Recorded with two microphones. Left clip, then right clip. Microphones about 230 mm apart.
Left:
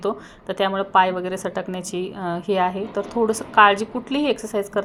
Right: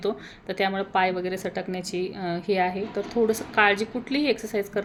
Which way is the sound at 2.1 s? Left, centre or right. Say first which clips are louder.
Left 4 dB; centre.